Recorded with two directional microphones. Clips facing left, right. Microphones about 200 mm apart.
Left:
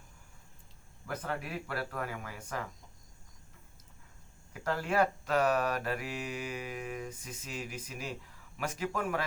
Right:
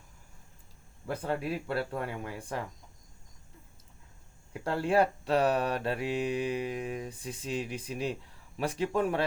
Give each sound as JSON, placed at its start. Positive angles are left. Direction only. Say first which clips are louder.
{"t": 1.0, "sound": "speech", "louder": "right 5 dB", "side_deg": -30}
{"t": 4.6, "sound": "mantra", "louder": "right 3 dB", "side_deg": -30}